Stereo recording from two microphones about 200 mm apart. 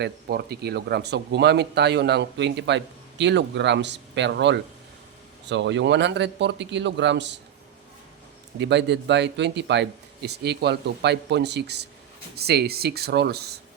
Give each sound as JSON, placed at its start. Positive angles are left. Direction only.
{"t": 0.0, "sound": "speech", "side_deg": -55}
{"t": 8.5, "sound": "speech", "side_deg": -60}